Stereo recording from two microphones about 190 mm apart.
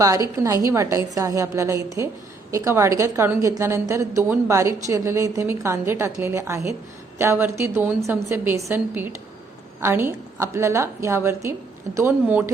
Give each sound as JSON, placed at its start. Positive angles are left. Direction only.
{"t": 0.4, "sound": "a woman's voice", "side_deg": -15}